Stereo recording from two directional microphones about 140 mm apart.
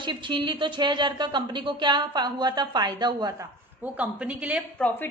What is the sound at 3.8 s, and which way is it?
Speech, 10° right (ahead or behind).